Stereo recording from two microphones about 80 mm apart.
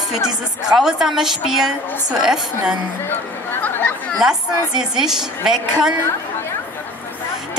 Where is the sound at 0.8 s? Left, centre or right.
Centre.